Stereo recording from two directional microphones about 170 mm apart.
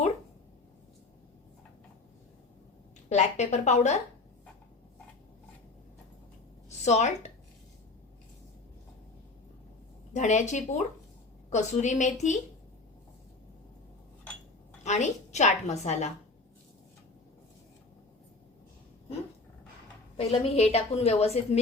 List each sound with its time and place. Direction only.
3.1 s a woman's voice: 40° left (ahead or behind)
6.7 s a woman's voice: 40° left (ahead or behind)
10.1 s a woman's voice: 45° left (ahead or behind)
14.8 s a woman's voice: 45° left (ahead or behind)
20.1 s a woman's voice: 40° left (ahead or behind)